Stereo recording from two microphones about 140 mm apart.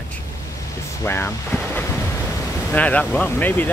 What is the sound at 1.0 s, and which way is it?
Speech, 15° left (ahead or behind).